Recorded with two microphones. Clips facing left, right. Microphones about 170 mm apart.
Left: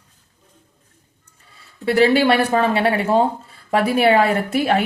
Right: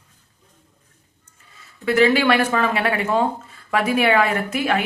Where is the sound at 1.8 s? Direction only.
35° left (ahead or behind).